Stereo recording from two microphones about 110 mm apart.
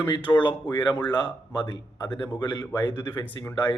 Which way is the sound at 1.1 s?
40° left (ahead or behind).